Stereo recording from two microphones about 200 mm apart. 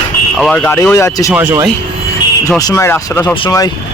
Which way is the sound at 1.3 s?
10° right (ahead or behind).